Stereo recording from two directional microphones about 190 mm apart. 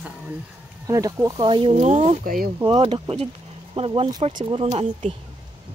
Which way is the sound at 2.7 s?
30° right (ahead or behind).